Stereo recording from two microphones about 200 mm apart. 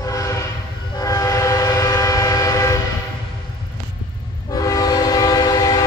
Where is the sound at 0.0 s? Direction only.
15° left (ahead or behind).